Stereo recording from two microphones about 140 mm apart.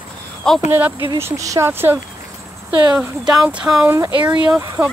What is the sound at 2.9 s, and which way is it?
Speech, 5° right (ahead or behind).